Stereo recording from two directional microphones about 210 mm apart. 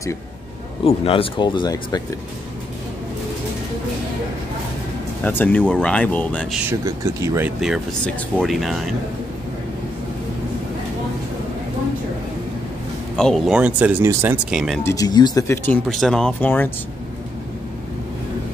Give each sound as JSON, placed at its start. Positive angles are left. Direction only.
{"t": 0.8, "sound": "speech", "side_deg": 25}
{"t": 5.2, "sound": "speech", "side_deg": 5}
{"t": 6.7, "sound": "speech", "side_deg": -15}
{"t": 13.1, "sound": "speech", "side_deg": 0}
{"t": 14.8, "sound": "speech", "side_deg": 15}